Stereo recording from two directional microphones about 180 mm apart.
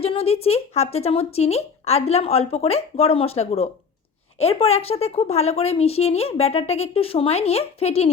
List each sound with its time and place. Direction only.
0.0 s a woman's voice: 30° left (ahead or behind)